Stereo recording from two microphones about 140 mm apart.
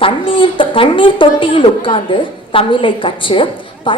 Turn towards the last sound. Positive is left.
turn(degrees=35)  # may be behind; listen again after turning